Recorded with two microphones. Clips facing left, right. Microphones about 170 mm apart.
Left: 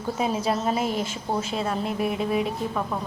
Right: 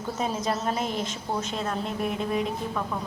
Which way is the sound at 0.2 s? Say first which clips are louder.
Left 3 dB; 5° left (ahead or behind).